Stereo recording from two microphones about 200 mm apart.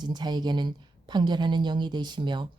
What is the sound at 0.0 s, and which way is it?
A woman's voice, 20° right (ahead or behind).